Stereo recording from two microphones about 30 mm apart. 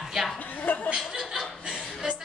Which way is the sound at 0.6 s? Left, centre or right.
Left.